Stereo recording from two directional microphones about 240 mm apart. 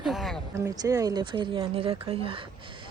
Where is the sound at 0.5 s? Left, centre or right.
Centre.